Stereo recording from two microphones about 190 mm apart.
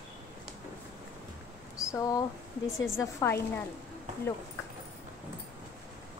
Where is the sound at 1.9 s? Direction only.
15° left (ahead or behind).